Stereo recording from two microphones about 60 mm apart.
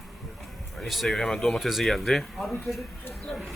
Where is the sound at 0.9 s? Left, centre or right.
Centre.